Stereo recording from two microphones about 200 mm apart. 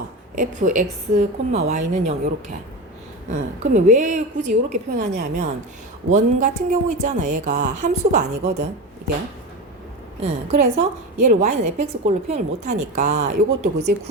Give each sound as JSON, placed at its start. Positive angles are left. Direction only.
{"t": 0.3, "sound": "a woman's voice", "side_deg": -40}
{"t": 6.1, "sound": "a woman's voice", "side_deg": -35}
{"t": 10.2, "sound": "a woman's voice", "side_deg": -30}
{"t": 13.2, "sound": "speech", "side_deg": -55}